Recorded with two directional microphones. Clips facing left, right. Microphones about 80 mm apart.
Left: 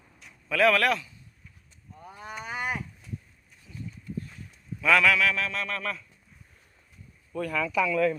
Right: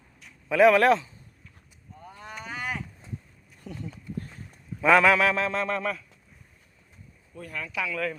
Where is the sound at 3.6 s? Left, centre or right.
Right.